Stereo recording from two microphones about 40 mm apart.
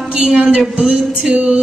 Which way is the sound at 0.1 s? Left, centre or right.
Centre.